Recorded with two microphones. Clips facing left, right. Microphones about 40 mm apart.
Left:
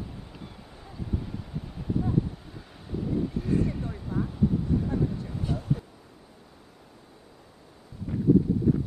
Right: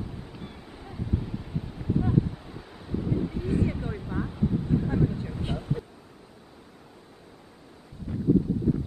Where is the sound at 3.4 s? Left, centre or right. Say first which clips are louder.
Right 1 dB; right.